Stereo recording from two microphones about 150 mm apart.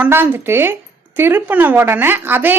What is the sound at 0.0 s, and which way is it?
Speech, 15° right (ahead or behind).